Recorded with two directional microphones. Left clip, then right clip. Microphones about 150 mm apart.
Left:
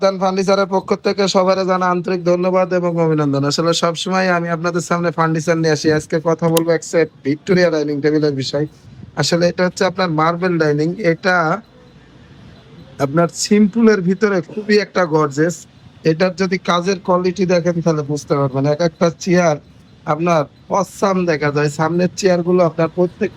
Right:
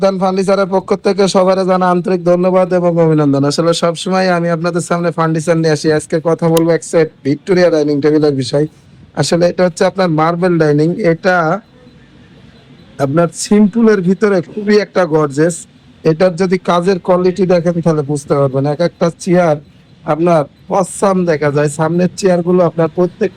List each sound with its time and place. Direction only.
0.0 s speech: 10° left (ahead or behind)
13.0 s speech: 10° left (ahead or behind)